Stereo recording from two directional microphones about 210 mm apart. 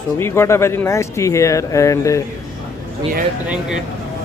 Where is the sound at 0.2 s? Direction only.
10° left (ahead or behind).